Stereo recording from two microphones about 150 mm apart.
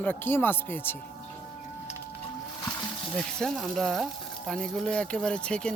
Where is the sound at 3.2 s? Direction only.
5° left (ahead or behind).